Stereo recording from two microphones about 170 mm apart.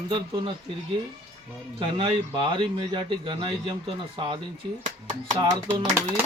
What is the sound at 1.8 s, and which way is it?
A man's voice, 30° right (ahead or behind).